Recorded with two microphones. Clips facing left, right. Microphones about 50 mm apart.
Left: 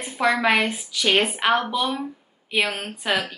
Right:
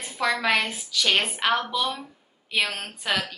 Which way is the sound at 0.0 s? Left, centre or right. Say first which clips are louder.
Left 4 dB; centre.